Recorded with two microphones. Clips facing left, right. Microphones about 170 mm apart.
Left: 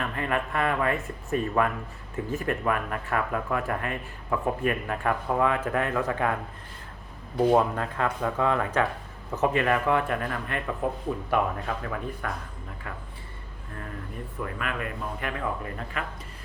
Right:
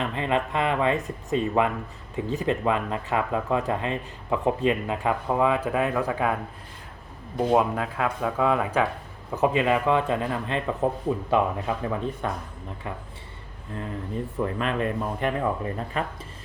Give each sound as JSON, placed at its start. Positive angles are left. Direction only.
{"t": 0.0, "sound": "speech", "side_deg": -20}
{"t": 7.5, "sound": "speech", "side_deg": -10}
{"t": 11.3, "sound": "speech", "side_deg": -20}
{"t": 14.3, "sound": "speech", "side_deg": -25}